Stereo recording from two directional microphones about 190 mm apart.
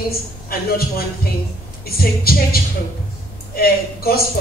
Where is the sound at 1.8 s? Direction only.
55° left (ahead or behind).